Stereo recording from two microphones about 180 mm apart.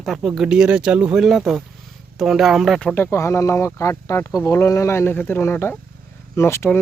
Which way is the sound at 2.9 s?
15° left (ahead or behind).